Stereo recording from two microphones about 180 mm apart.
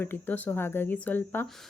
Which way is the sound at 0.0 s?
10° left (ahead or behind).